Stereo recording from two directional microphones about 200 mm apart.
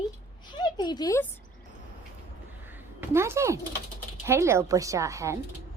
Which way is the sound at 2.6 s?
10° right (ahead or behind).